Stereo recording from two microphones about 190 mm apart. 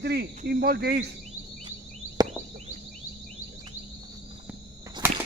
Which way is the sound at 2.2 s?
20° right (ahead or behind).